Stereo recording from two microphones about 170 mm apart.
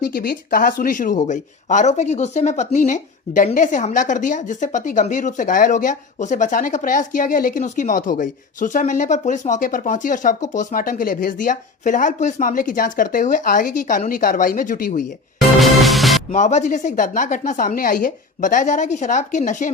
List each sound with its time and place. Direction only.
0.0 s speech: 65° left (ahead or behind)
15.4 s music: centre (ahead or behind)
16.3 s speech: 45° left (ahead or behind)